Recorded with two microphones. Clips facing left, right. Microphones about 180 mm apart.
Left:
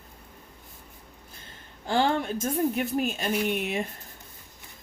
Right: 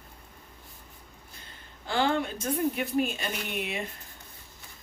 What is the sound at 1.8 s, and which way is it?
A woman's voice, 45° left (ahead or behind).